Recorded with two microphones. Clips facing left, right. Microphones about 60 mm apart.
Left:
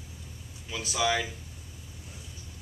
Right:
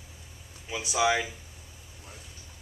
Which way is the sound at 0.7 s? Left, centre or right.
Centre.